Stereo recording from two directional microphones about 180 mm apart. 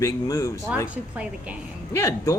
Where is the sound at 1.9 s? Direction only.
20° left (ahead or behind).